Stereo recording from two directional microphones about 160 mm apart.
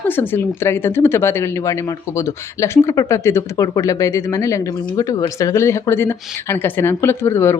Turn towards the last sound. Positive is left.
turn(degrees=15)  # may be behind; listen again after turning